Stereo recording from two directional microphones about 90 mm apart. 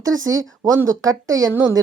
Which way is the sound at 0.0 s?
40° right (ahead or behind).